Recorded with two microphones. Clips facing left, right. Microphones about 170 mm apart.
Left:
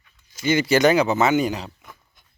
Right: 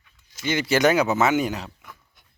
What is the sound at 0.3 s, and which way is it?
Speech, centre (ahead or behind).